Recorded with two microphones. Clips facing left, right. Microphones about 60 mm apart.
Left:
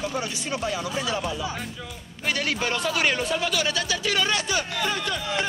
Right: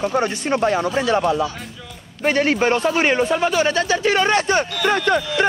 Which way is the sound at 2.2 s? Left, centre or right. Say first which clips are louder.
Right 9 dB; right.